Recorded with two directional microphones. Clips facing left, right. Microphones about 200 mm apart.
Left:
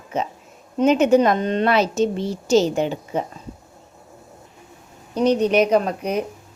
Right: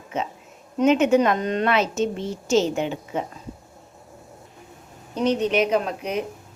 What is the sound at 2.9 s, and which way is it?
Speech, 40° left (ahead or behind).